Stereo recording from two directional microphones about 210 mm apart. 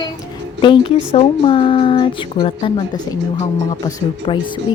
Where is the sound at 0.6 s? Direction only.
25° left (ahead or behind).